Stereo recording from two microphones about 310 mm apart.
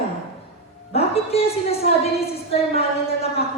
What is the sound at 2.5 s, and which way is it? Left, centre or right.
Speech, centre.